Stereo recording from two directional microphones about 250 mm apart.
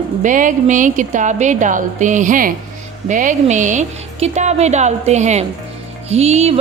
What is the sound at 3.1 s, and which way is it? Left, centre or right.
Music, right.